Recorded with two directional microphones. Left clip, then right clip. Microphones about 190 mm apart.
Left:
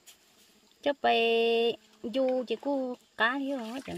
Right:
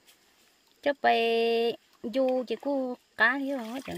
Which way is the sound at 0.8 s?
5° right (ahead or behind).